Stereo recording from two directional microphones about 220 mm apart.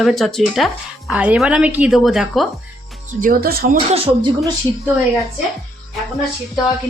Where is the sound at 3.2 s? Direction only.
40° right (ahead or behind).